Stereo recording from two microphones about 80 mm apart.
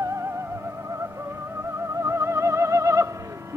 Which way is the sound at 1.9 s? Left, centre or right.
Right.